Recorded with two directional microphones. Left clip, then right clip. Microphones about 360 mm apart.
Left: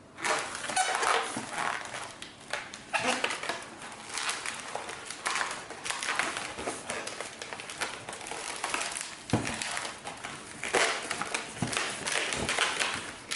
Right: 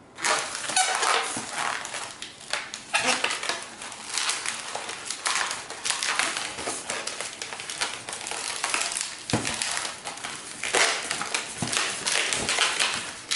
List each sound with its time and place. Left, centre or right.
0.2 s a sound: centre
7.8 s crumpling: centre
8.5 s crushing: centre